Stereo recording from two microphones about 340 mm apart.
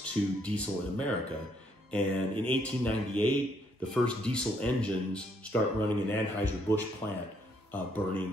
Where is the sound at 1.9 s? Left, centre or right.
Centre.